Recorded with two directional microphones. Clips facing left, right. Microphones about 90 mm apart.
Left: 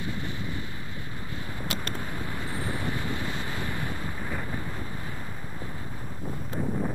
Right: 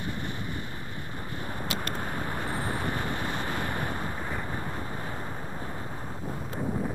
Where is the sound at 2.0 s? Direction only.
50° right (ahead or behind).